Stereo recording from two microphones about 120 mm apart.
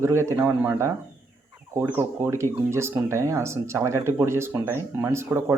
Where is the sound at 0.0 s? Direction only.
25° right (ahead or behind).